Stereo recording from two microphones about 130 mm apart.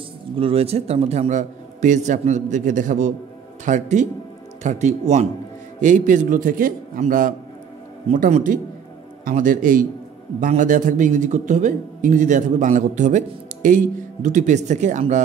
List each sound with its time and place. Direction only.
0.4 s a man's voice: 50° right (ahead or behind)
5.8 s a man's voice: 75° right (ahead or behind)
8.1 s a man's voice: 65° right (ahead or behind)
9.2 s a man's voice: 90° right; by 15.2 s 65° right (ahead or behind)